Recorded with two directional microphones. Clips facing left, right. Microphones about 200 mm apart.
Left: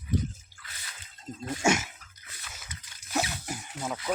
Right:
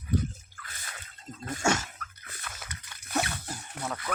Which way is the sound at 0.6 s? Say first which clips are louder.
Right 3 dB; 50° right (ahead or behind).